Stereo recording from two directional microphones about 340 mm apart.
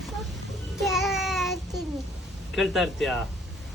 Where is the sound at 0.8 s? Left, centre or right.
Centre.